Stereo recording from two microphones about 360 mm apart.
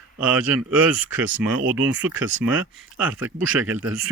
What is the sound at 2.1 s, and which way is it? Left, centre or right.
Speech, right.